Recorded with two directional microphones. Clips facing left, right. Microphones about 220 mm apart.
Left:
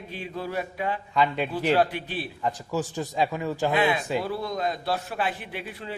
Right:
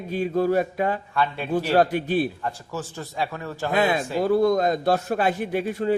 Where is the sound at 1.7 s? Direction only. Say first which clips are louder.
Right 7 dB; 45° right (ahead or behind).